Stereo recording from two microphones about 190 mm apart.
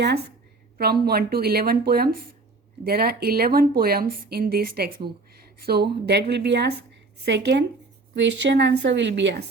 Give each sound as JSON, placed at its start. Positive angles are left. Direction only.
{"t": 0.0, "sound": "a woman's voice", "side_deg": -60}